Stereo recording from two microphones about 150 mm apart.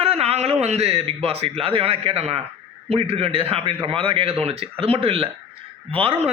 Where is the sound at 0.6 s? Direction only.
45° right (ahead or behind).